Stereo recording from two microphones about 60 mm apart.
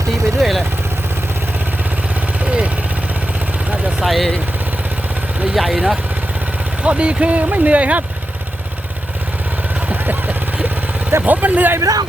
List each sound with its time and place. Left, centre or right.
0.1 s vehicle: centre
2.4 s vehicle: right
4.0 s vehicle: centre
5.5 s speech: centre
6.8 s speech: right
9.9 s vehicle: right
11.3 s speech: right
11.8 s a man's voice: right